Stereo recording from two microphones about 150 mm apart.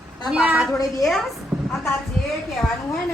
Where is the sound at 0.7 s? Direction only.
20° left (ahead or behind).